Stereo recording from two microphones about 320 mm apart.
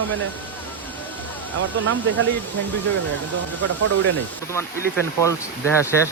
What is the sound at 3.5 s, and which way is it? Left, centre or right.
Speech, right.